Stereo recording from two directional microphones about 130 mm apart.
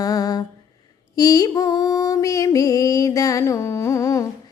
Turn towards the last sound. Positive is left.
turn(degrees=25)  # may be behind; listen again after turning